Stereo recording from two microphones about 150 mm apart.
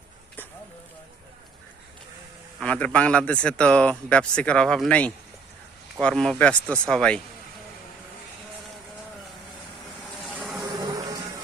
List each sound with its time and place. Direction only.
2.6 s speech: 5° left (ahead or behind)
10.2 s vehicle: centre (ahead or behind)
10.6 s a sound: 25° right (ahead or behind)